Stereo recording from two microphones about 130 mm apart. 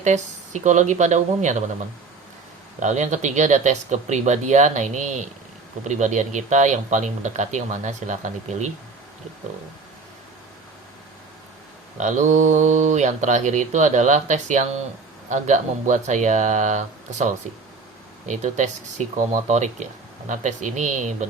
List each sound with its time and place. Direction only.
0.0 s speech: 65° right (ahead or behind)
2.8 s speech: 65° right (ahead or behind)
11.9 s speech: 70° right (ahead or behind)